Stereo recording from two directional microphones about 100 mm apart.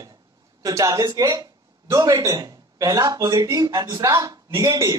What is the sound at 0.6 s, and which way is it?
Speech, 35° right (ahead or behind).